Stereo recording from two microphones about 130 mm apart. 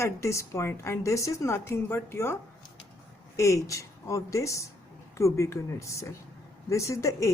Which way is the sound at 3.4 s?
25° left (ahead or behind).